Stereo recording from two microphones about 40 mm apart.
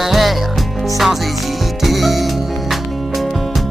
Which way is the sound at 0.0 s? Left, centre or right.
Centre.